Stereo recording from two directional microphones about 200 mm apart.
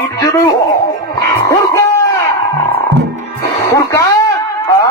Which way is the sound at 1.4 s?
15° left (ahead or behind).